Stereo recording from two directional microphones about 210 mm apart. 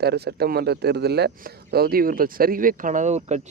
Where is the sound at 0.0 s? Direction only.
50° right (ahead or behind).